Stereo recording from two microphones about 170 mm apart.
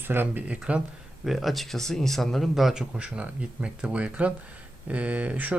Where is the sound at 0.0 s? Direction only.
10° right (ahead or behind).